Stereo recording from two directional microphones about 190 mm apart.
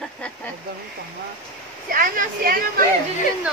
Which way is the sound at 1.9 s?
45° right (ahead or behind).